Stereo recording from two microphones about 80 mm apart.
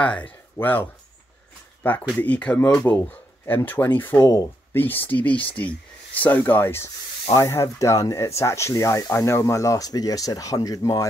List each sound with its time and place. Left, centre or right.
0.0 s speech: centre
7.3 s speech: left